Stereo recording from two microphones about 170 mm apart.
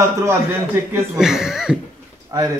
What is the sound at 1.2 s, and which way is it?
Speech, 5° right (ahead or behind).